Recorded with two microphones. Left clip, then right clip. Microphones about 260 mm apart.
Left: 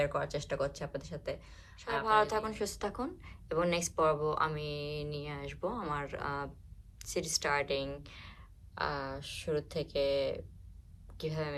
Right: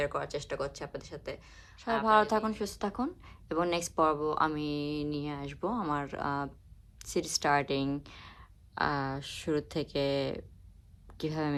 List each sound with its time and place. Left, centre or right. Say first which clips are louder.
0.0 s speech: even; centre